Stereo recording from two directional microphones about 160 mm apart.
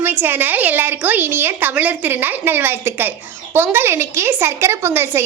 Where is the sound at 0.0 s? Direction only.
10° right (ahead or behind).